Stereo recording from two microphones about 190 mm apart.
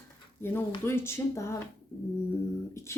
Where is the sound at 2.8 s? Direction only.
15° left (ahead or behind).